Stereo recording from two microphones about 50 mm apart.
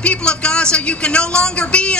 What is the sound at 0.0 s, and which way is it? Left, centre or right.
A man's voice, left.